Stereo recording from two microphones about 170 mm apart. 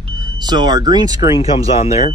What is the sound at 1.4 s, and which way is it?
Speech, 35° left (ahead or behind).